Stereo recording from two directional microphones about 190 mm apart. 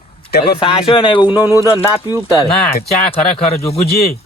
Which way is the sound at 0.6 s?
30° left (ahead or behind).